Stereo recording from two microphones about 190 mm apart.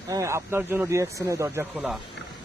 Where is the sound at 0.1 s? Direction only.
15° right (ahead or behind).